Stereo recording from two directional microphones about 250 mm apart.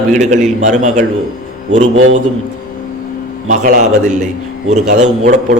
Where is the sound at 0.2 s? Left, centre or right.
Right.